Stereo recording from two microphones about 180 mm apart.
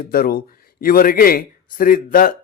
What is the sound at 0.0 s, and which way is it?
A man's voice, 55° left (ahead or behind).